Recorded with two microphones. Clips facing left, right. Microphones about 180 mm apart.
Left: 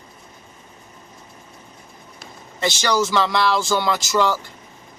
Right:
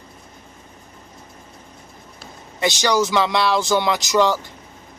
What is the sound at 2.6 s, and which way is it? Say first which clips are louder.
Speech: right 2 dB; 15° right (ahead or behind).